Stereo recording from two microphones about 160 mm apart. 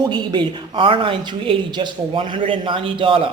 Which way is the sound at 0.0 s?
30° right (ahead or behind).